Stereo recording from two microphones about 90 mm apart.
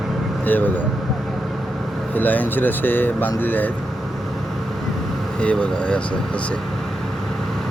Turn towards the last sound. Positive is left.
turn(degrees=10)  # may be behind; listen again after turning